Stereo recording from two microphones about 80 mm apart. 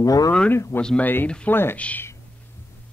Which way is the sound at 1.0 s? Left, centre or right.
Left.